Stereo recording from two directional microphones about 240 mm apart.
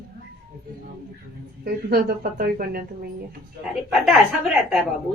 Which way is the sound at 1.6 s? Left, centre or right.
Right.